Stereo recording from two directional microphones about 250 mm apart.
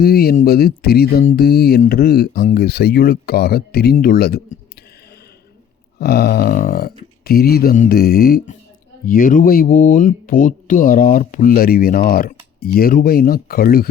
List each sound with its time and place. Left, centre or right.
0.0 s speech: left
6.0 s speech: left